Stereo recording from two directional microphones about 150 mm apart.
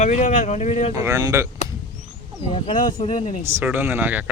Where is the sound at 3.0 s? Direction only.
45° left (ahead or behind).